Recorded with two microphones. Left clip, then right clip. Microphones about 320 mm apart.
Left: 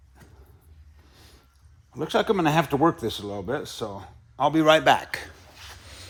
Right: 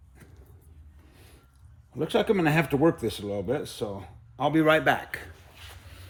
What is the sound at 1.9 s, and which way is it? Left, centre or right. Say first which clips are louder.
Speech: left 1 dB; centre.